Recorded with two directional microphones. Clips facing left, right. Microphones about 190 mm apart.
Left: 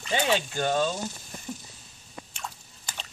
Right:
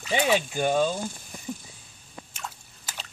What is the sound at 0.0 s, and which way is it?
Speech, 10° right (ahead or behind).